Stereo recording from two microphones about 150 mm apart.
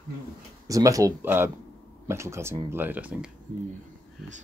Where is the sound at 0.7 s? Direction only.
25° right (ahead or behind).